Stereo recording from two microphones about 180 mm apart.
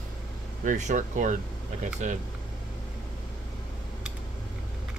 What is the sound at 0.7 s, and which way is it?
Speech, 45° right (ahead or behind).